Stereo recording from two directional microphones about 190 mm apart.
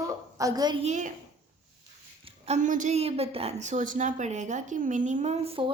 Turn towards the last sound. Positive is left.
turn(degrees=-30)  # may be behind; listen again after turning